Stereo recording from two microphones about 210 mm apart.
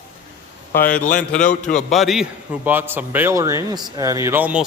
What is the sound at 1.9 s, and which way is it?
A man's voice, centre (ahead or behind).